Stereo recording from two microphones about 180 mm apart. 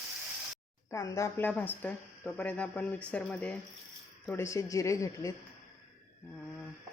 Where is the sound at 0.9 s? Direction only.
15° left (ahead or behind).